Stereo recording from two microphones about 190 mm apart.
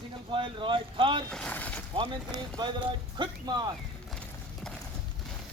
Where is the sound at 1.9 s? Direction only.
25° right (ahead or behind).